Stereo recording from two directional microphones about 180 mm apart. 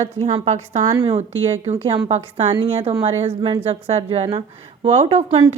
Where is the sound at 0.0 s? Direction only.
35° right (ahead or behind).